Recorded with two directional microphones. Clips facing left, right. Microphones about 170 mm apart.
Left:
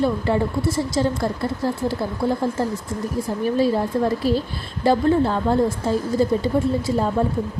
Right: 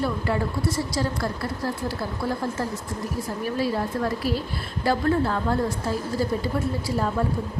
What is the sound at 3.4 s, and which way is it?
A woman's voice, 25° left (ahead or behind).